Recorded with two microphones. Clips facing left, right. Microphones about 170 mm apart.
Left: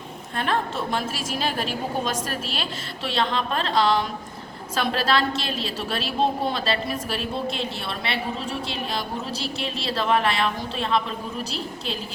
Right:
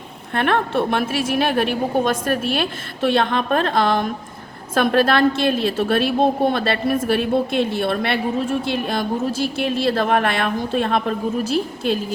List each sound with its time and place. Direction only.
0.3 s a woman's voice: 65° right (ahead or behind)